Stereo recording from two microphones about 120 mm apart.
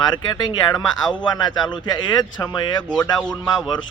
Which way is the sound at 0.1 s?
35° left (ahead or behind).